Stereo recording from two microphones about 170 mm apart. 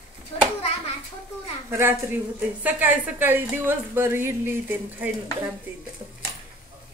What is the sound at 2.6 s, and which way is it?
A woman's voice, 10° right (ahead or behind).